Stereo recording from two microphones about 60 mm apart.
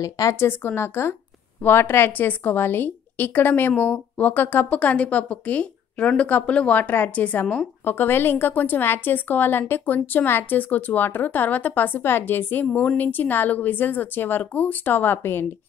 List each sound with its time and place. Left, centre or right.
0.0 s a woman's voice: left
0.4 s a woman's voice: left
4.7 s a woman's voice: centre
7.8 s a woman's voice: left